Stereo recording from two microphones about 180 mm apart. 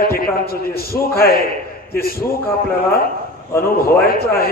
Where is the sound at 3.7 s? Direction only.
55° left (ahead or behind).